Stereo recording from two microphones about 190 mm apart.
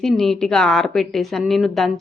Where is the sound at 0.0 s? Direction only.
Centre (ahead or behind).